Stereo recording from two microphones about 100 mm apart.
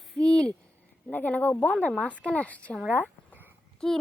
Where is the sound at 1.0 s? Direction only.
15° left (ahead or behind).